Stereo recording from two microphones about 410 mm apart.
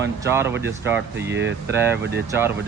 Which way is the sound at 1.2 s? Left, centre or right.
Right.